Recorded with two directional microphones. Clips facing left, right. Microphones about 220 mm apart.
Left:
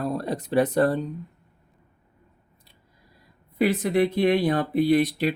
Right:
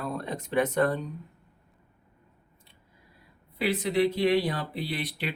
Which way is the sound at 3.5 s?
50° left (ahead or behind).